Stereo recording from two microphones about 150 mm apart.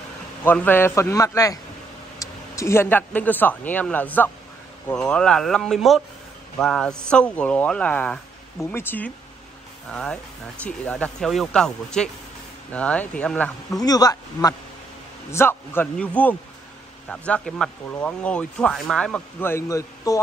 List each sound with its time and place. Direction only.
0.4 s speech: 15° left (ahead or behind)
10.6 s speech: 10° left (ahead or behind)
13.7 s speech: 25° left (ahead or behind)
15.3 s speech: 15° left (ahead or behind)